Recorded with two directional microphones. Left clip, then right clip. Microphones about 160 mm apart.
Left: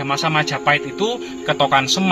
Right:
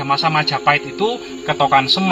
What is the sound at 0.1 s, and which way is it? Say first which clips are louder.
A man's voice: right 3 dB; 15° left (ahead or behind).